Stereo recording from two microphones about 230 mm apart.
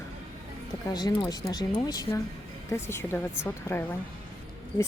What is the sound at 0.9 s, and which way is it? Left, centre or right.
Speech, centre.